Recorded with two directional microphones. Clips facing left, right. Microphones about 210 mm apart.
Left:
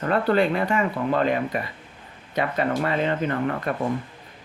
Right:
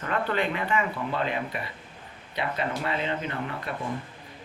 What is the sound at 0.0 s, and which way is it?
Speech, 40° left (ahead or behind).